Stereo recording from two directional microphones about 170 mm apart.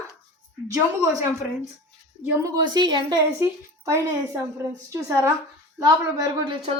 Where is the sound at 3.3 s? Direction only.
15° right (ahead or behind).